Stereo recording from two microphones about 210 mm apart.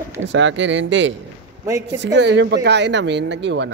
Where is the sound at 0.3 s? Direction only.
60° right (ahead or behind).